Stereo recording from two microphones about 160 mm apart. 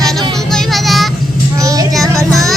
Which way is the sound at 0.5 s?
Centre (ahead or behind).